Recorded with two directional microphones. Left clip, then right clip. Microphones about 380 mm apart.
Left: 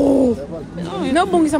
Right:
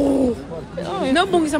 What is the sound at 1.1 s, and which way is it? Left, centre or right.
Speech, left.